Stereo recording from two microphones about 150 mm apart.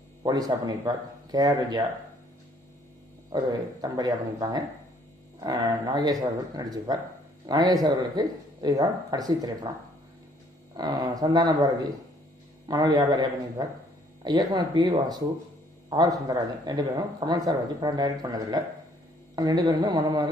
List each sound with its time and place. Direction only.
0.2 s speech: 25° right (ahead or behind)
3.3 s speech: 30° right (ahead or behind)
10.7 s speech: 25° right (ahead or behind)